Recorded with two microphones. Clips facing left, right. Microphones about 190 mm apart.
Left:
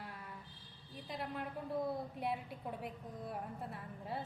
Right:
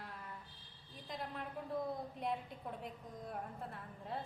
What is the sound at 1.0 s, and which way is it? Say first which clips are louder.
A woman's voice: left 2 dB; 5° left (ahead or behind).